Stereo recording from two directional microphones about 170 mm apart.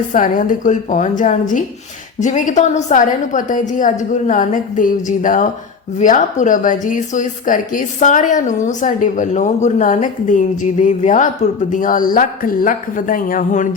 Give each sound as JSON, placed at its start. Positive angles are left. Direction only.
{"t": 0.1, "sound": "speech", "side_deg": 50}